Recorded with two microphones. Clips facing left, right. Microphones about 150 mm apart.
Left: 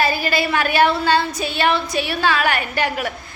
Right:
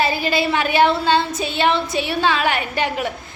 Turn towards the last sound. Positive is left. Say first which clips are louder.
# even
turn(degrees=-20)  # may be behind; listen again after turning